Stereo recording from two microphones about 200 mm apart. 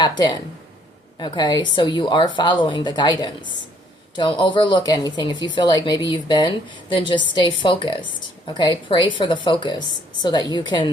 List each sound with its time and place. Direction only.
0.0 s a woman's voice: 20° left (ahead or behind)